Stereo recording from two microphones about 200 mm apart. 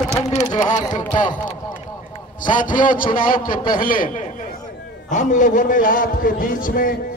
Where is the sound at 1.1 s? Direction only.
40° left (ahead or behind).